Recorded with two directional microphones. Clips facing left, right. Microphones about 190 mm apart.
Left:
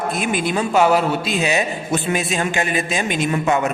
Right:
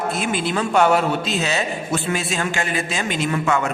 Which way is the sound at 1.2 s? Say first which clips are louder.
Left 3 dB; 15° left (ahead or behind).